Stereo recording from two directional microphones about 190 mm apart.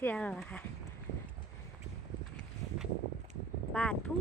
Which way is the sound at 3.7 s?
5° left (ahead or behind).